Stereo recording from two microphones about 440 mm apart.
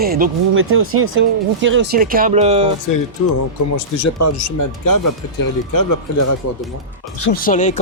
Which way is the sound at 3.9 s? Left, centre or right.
Left.